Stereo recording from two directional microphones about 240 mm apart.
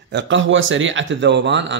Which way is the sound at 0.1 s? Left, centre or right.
Right.